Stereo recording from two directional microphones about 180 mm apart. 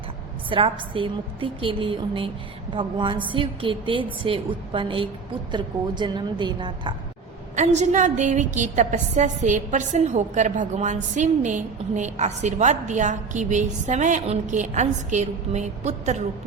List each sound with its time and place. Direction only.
0.5 s a woman's voice: 30° right (ahead or behind)
7.5 s a woman's voice: 40° right (ahead or behind)